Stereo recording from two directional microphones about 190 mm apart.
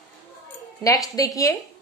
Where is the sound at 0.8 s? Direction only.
20° left (ahead or behind).